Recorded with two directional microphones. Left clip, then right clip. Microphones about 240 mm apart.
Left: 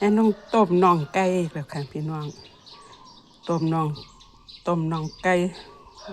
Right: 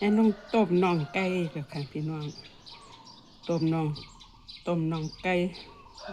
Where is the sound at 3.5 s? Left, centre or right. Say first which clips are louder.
Left 4 dB; centre.